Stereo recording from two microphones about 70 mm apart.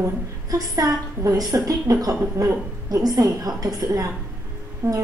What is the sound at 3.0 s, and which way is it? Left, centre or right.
Speech, right.